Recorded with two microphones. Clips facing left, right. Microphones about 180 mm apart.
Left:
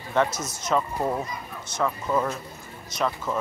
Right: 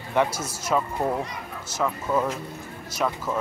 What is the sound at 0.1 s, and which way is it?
Speech, 10° right (ahead or behind).